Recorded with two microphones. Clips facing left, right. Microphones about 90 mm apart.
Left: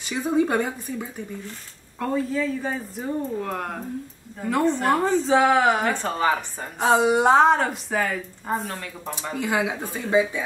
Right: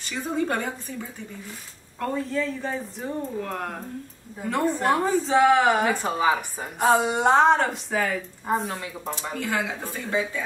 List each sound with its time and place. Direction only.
0.0 s speech: 10° left (ahead or behind)
2.0 s speech: 5° left (ahead or behind)
9.3 s speech: 15° left (ahead or behind)